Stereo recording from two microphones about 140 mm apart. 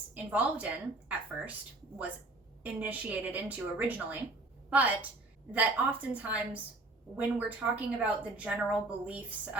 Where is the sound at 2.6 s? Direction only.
10° right (ahead or behind).